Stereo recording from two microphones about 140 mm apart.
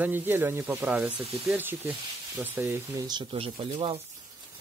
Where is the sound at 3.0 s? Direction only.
35° right (ahead or behind).